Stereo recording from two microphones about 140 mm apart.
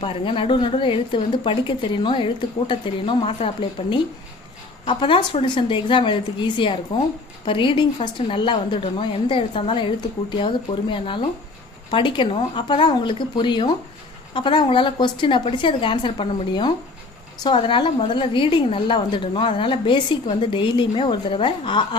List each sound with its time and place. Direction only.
0.0 s a woman's voice: 40° left (ahead or behind)